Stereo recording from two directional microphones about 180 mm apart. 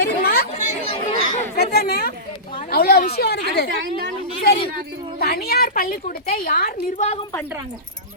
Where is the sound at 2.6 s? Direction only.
60° left (ahead or behind).